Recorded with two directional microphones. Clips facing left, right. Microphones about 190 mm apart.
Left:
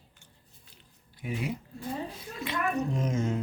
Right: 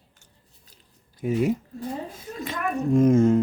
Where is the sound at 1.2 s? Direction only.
45° right (ahead or behind).